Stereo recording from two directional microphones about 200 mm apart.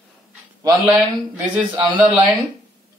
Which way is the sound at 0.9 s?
10° right (ahead or behind).